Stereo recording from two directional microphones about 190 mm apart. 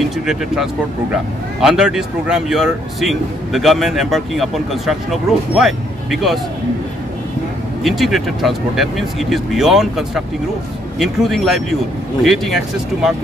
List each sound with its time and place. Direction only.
1.6 s speech: 5° right (ahead or behind)
7.8 s speech: centre (ahead or behind)